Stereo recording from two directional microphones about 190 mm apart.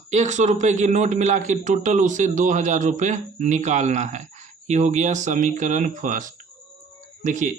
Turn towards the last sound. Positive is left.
turn(degrees=-40)  # may be behind; listen again after turning